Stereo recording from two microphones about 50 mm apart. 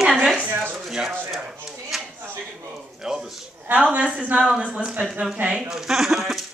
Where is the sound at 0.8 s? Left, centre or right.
Centre.